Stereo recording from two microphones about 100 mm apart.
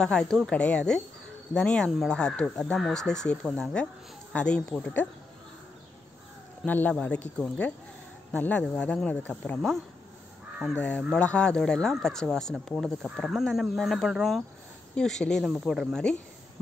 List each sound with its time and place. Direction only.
0.0 s speech: 5° left (ahead or behind)
6.6 s speech: 15° left (ahead or behind)
10.8 s speech: 10° left (ahead or behind)